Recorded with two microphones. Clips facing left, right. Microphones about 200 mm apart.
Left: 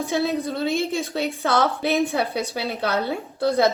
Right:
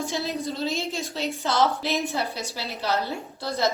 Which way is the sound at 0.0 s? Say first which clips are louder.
Left 5 dB; 55° left (ahead or behind).